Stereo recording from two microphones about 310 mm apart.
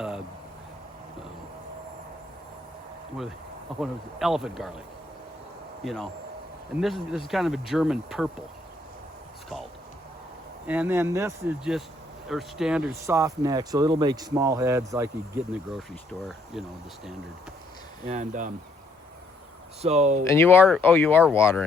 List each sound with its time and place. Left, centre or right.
3.8 s speech: centre
5.8 s speech: centre
10.7 s speech: centre
18.1 s speech: right
19.8 s speech: right
20.2 s speech: centre